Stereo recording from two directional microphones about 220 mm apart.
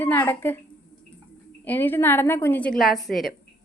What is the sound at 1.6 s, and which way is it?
A woman's voice, 10° left (ahead or behind).